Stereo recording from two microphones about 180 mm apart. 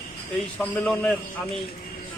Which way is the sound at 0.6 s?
10° left (ahead or behind).